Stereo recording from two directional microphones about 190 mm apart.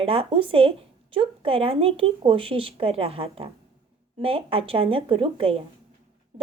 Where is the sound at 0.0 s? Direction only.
30° right (ahead or behind).